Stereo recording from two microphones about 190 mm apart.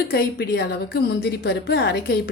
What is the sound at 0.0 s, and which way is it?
A woman's voice, 55° left (ahead or behind).